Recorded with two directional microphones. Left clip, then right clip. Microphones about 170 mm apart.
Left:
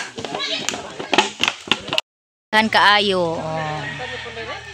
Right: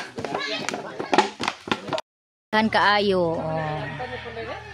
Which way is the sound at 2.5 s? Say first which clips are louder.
Left 5 dB; centre (ahead or behind).